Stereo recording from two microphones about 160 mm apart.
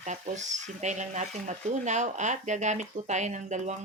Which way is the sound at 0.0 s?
45° right (ahead or behind).